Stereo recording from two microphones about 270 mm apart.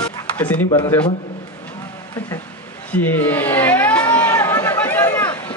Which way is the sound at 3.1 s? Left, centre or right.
Centre.